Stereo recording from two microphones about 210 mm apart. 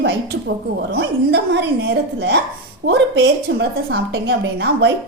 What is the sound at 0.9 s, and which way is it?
A woman's voice, 55° right (ahead or behind).